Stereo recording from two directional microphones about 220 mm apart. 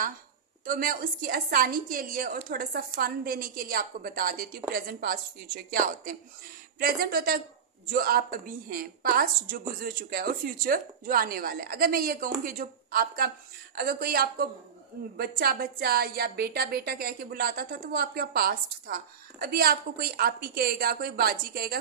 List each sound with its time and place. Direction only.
0.6 s a woman's voice: 40° right (ahead or behind)